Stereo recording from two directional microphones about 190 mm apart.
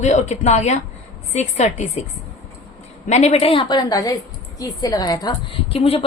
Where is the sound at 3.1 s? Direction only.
35° left (ahead or behind).